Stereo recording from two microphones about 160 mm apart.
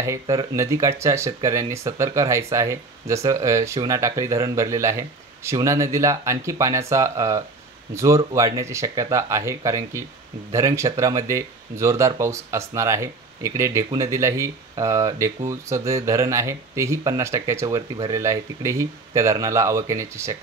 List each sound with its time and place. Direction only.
0.0 s speech: 20° right (ahead or behind)